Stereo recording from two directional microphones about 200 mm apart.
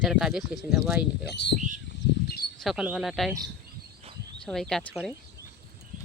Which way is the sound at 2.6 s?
Centre (ahead or behind).